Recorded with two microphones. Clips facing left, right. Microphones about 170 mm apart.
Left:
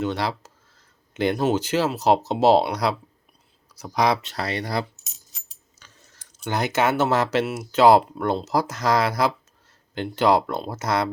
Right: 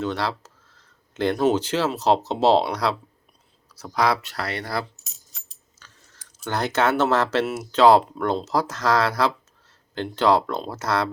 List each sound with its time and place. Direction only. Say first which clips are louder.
0.0 s speech: left 1 dB; 15° left (ahead or behind)
6.4 s speech: even; 10° left (ahead or behind)
7.4 s speech: even; centre (ahead or behind)